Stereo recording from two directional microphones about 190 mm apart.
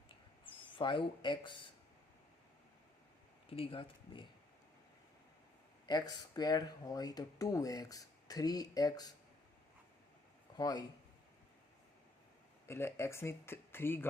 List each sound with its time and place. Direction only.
0.4 s speech: 25° left (ahead or behind)
3.5 s speech: 30° left (ahead or behind)
5.8 s speech: 20° left (ahead or behind)
10.6 s speech: 20° left (ahead or behind)
12.6 s speech: 15° left (ahead or behind)